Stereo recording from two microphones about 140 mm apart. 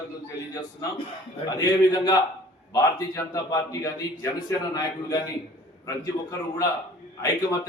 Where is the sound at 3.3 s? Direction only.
25° left (ahead or behind).